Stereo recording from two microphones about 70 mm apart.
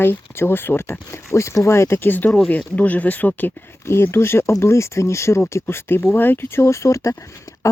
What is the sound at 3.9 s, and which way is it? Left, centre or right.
Speech, left.